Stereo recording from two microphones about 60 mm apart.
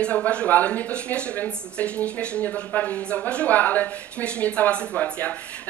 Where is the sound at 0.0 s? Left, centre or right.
Centre.